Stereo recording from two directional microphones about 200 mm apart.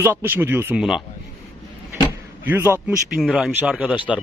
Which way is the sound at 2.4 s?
10° right (ahead or behind).